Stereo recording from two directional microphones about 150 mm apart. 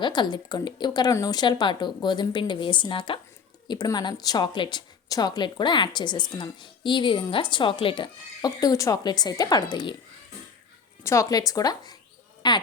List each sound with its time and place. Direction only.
0.0 s speech: 30° left (ahead or behind)
11.0 s speech: 20° left (ahead or behind)